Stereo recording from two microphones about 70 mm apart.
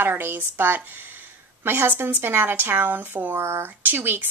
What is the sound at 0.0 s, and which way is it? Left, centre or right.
A woman's voice, right.